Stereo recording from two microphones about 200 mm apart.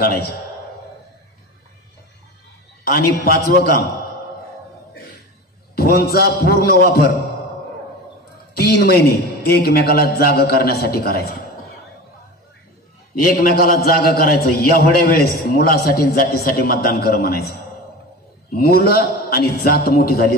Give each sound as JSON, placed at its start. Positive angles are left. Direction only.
{"t": 0.0, "sound": "a man's voice", "side_deg": 50}
{"t": 2.8, "sound": "a man's voice", "side_deg": 50}
{"t": 5.8, "sound": "a man's voice", "side_deg": 50}
{"t": 8.5, "sound": "a man's voice", "side_deg": 50}
{"t": 13.2, "sound": "a man's voice", "side_deg": 45}
{"t": 18.6, "sound": "a man's voice", "side_deg": 50}